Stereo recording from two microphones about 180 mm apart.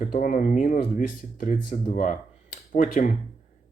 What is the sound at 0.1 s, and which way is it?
Speech, 50° left (ahead or behind).